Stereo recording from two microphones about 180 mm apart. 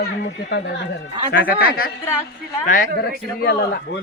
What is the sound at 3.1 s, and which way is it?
Speech, 60° left (ahead or behind).